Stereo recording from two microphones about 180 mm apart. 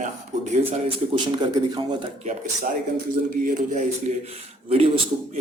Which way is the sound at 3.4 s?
40° right (ahead or behind).